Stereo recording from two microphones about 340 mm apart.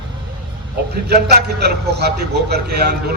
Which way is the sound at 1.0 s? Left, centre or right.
Right.